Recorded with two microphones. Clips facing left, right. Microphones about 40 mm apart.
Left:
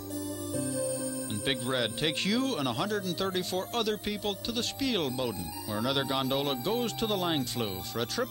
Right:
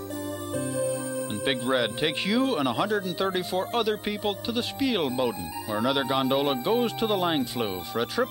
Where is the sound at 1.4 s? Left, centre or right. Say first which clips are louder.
Right 5 dB; right.